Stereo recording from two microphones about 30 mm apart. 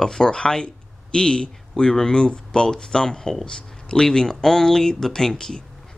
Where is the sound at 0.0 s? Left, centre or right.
Left.